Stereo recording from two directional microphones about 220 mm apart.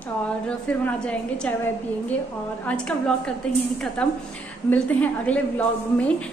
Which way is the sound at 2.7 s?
5° left (ahead or behind).